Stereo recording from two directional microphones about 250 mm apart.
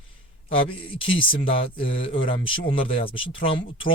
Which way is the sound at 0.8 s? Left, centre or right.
Left.